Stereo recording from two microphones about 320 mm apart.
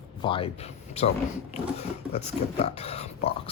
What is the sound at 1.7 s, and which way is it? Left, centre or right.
Speech, centre.